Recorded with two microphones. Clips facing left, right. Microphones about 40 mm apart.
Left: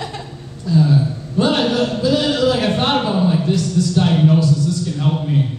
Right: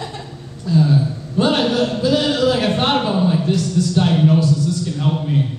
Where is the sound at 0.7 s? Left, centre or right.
Centre.